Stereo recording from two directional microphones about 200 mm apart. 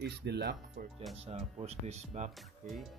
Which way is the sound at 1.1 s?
30° right (ahead or behind).